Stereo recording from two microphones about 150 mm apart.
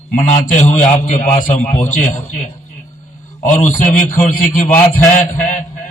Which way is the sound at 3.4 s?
60° left (ahead or behind).